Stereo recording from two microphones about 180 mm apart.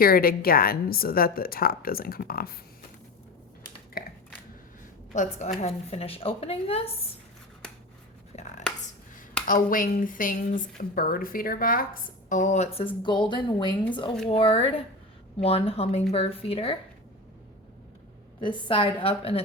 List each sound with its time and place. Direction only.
0.0 s a woman's voice: 55° left (ahead or behind)
4.0 s a sound: 55° left (ahead or behind)
5.1 s a woman's voice: 40° left (ahead or behind)
9.5 s a woman's voice: 50° left (ahead or behind); by 16.7 s 30° left (ahead or behind)
18.3 s speech: 30° left (ahead or behind)